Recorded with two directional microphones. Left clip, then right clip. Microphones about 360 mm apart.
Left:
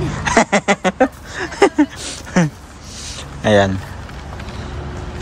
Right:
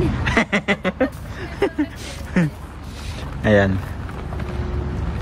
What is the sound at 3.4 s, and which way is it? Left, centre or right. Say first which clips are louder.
Speech: left 3 dB; centre.